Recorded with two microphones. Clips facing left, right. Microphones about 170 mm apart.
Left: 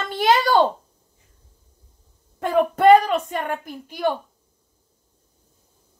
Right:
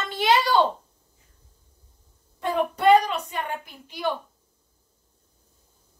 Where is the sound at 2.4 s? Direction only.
50° left (ahead or behind).